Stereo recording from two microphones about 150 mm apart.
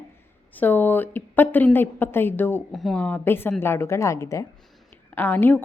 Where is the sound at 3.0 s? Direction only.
15° left (ahead or behind).